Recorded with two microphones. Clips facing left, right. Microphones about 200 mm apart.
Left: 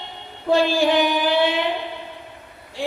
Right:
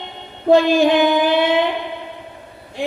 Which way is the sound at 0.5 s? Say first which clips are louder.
Right 5 dB; 20° right (ahead or behind).